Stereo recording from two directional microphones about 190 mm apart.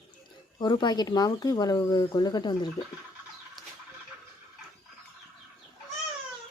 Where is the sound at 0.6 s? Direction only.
25° left (ahead or behind).